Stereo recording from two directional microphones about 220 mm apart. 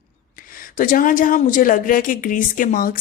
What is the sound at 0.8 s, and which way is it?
Speech, 40° left (ahead or behind).